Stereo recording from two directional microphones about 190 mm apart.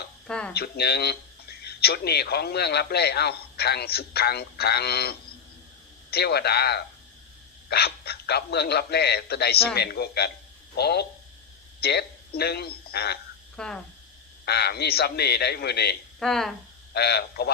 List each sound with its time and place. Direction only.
0.3 s speech: 5° left (ahead or behind)
0.5 s speech: 55° left (ahead or behind)
13.6 s speech: 5° left (ahead or behind)
14.4 s speech: 55° left (ahead or behind)
16.2 s speech: centre (ahead or behind)
16.9 s speech: 60° left (ahead or behind)